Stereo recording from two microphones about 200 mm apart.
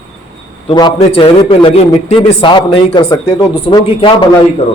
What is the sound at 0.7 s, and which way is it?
A man's voice, 25° left (ahead or behind).